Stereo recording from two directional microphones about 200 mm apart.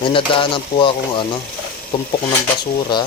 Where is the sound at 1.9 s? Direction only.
25° left (ahead or behind).